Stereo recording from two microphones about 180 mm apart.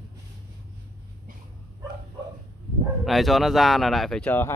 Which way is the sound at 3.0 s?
Centre (ahead or behind).